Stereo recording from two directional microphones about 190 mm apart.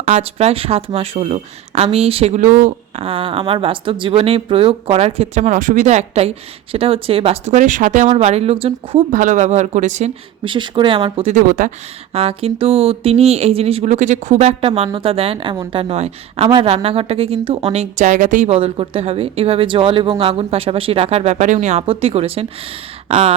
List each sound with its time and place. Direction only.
0.0 s speech: 35° right (ahead or behind)
9.1 s speech: 40° right (ahead or behind)
10.4 s speech: 25° right (ahead or behind); by 11.7 s 45° right (ahead or behind)
12.1 s speech: 30° right (ahead or behind)